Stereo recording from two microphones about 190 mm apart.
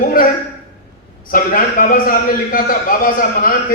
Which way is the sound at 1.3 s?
45° left (ahead or behind).